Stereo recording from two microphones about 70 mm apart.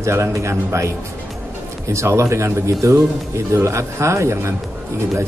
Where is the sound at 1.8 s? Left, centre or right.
Right.